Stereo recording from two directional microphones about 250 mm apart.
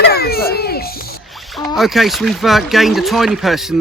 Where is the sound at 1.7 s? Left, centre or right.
Centre.